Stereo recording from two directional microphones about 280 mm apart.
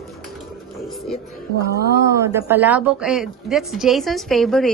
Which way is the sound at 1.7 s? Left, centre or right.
Left.